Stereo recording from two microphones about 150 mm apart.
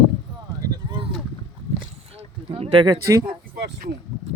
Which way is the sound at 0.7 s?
30° right (ahead or behind).